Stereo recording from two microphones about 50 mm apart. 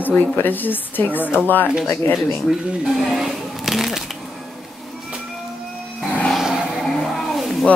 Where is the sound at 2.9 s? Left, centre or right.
Centre.